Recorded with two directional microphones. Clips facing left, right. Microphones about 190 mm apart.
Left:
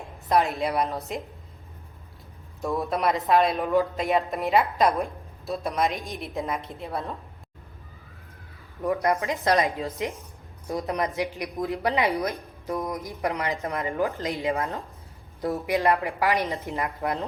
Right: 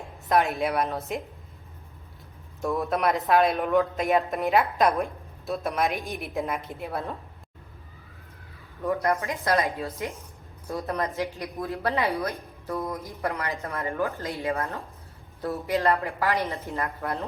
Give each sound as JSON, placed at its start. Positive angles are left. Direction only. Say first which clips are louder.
{"t": 0.3, "sound": "speech", "louder": "even", "side_deg": 0}
{"t": 2.6, "sound": "speech", "louder": "right 1 dB", "side_deg": 0}
{"t": 8.8, "sound": "speech", "louder": "left 1 dB", "side_deg": 15}